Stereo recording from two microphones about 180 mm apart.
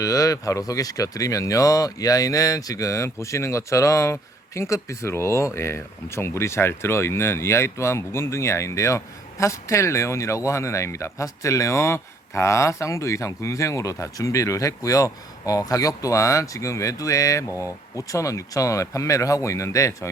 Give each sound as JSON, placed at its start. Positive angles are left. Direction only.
{"t": 0.0, "sound": "speech", "side_deg": 20}